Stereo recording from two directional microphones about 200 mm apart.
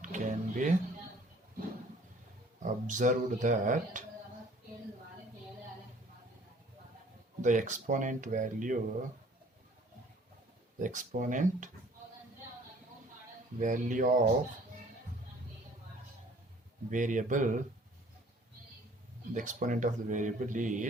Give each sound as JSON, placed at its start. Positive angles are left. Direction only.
{"t": 0.0, "sound": "music", "side_deg": -40}
{"t": 2.6, "sound": "speech", "side_deg": -40}
{"t": 7.4, "sound": "speech", "side_deg": -40}
{"t": 10.8, "sound": "speech", "side_deg": -40}
{"t": 13.6, "sound": "speech", "side_deg": -40}
{"t": 16.9, "sound": "speech", "side_deg": -40}
{"t": 19.3, "sound": "speech", "side_deg": -40}